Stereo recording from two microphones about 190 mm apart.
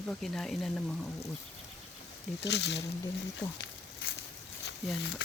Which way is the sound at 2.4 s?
65° left (ahead or behind).